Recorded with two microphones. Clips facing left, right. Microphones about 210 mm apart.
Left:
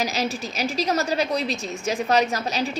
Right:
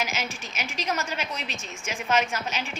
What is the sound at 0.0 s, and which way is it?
A woman's voice, 35° left (ahead or behind).